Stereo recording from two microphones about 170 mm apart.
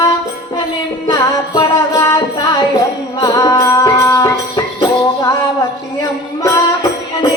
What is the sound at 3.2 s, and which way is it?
Music, 20° left (ahead or behind).